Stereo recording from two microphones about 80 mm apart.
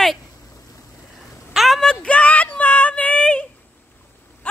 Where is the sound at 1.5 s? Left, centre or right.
Centre.